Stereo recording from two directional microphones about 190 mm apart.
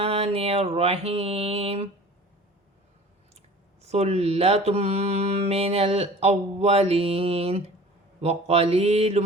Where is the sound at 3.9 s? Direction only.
35° right (ahead or behind).